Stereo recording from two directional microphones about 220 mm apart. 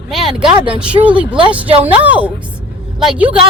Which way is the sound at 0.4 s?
20° right (ahead or behind).